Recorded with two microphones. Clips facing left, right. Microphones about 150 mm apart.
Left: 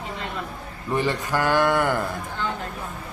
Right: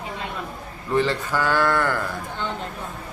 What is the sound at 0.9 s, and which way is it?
A man's voice, 15° left (ahead or behind).